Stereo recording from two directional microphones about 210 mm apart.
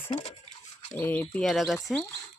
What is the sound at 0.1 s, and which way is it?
Speech, 30° left (ahead or behind).